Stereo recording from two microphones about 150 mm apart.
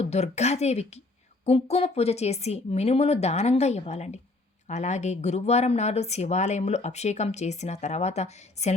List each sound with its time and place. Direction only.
0.0 s speech: 45° left (ahead or behind)